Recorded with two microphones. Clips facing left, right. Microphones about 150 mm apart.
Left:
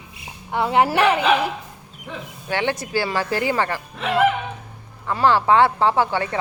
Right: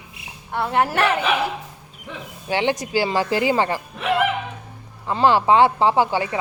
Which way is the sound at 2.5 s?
15° right (ahead or behind).